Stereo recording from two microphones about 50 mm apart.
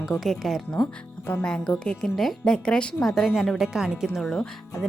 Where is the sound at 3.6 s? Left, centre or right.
Centre.